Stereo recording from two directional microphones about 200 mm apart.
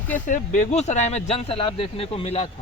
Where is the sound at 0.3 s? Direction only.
40° left (ahead or behind).